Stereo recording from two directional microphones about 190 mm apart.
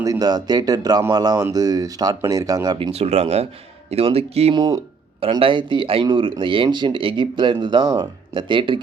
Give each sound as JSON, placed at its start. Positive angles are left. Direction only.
{"t": 0.0, "sound": "speech", "side_deg": -20}